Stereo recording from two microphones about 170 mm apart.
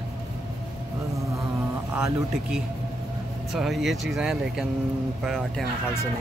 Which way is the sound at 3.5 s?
Centre (ahead or behind).